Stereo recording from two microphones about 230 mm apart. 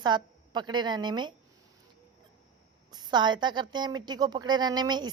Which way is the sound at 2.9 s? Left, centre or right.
Centre.